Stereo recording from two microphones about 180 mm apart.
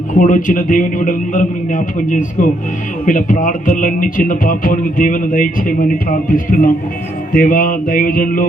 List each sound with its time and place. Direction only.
0.1 s speech: 45° left (ahead or behind)